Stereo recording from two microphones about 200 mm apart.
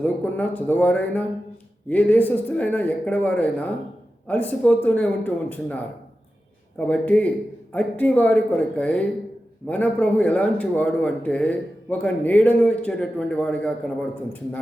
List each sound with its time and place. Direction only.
0.0 s a man's voice: 10° left (ahead or behind)